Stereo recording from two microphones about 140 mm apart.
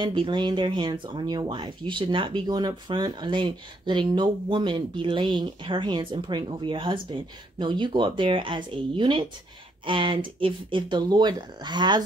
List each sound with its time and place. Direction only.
0.0 s speech: 35° right (ahead or behind)